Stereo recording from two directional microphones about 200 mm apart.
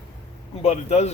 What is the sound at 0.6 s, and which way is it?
Speech, 30° left (ahead or behind).